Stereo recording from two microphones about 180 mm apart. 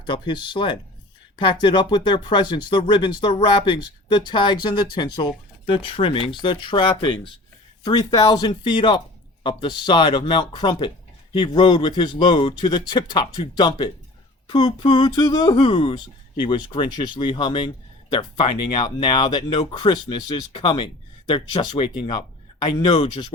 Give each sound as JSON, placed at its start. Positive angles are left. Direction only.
{"t": 0.0, "sound": "speech", "side_deg": 25}